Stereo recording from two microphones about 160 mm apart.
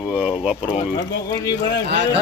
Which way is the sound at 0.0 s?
10° right (ahead or behind).